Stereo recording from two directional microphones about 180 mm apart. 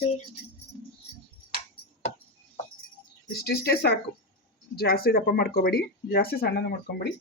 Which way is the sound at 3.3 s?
60° left (ahead or behind).